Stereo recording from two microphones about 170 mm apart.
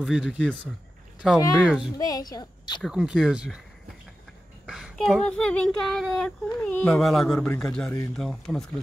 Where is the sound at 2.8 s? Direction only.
5° right (ahead or behind).